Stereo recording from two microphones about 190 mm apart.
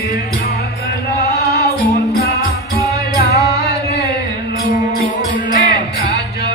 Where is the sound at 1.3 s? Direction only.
55° left (ahead or behind).